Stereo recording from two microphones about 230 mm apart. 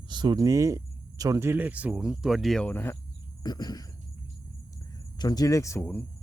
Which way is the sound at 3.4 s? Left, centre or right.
Centre.